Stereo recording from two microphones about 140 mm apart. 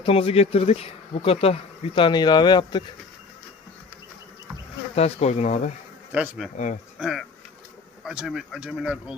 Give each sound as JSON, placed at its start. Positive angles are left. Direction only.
{"t": 0.0, "sound": "speech", "side_deg": 45}
{"t": 2.0, "sound": "speech", "side_deg": 35}
{"t": 4.9, "sound": "speech", "side_deg": 50}
{"t": 6.1, "sound": "bee", "side_deg": -5}
{"t": 7.0, "sound": "speech", "side_deg": 0}